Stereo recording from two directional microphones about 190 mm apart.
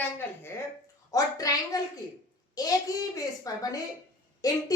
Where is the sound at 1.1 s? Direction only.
20° left (ahead or behind).